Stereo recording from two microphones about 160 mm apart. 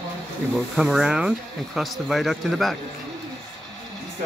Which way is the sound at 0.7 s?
Centre (ahead or behind).